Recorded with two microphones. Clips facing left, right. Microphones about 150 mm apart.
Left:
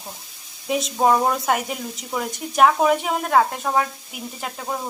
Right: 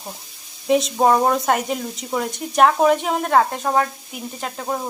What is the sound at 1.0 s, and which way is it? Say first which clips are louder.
Speech: even; centre (ahead or behind).